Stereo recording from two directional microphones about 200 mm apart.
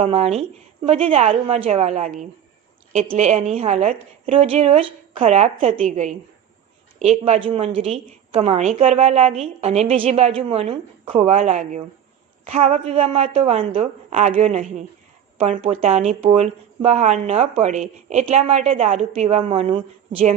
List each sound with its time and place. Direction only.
0.0 s a woman's voice: 35° right (ahead or behind)